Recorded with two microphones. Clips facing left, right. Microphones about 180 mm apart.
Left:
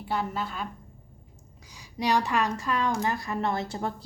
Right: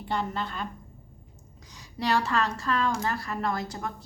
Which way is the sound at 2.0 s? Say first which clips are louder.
Left 1 dB; 15° left (ahead or behind).